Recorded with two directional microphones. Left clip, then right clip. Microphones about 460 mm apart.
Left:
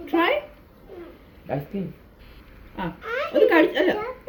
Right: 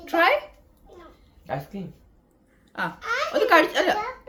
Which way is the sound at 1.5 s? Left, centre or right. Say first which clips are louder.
Left 2 dB; right.